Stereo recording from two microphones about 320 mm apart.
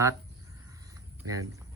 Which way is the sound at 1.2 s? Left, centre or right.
Right.